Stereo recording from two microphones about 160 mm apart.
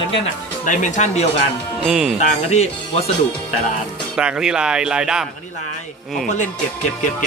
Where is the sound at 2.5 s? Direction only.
40° left (ahead or behind).